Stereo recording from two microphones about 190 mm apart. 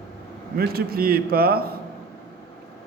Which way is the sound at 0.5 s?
55° right (ahead or behind).